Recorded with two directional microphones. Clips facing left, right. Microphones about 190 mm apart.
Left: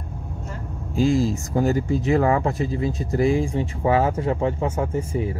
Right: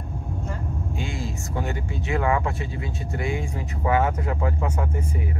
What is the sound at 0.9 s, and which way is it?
Speech, 35° left (ahead or behind).